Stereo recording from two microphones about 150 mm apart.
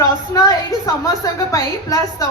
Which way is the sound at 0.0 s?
25° left (ahead or behind).